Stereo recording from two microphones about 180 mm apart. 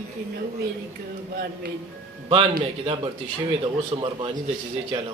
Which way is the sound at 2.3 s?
30° right (ahead or behind).